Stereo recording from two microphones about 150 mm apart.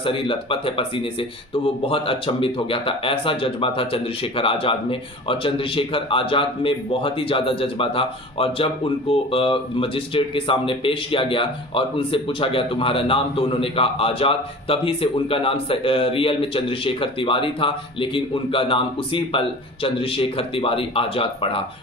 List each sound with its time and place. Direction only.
0.0 s a man's voice: 35° left (ahead or behind)